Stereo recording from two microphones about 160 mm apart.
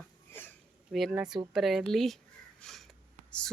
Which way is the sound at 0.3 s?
15° left (ahead or behind).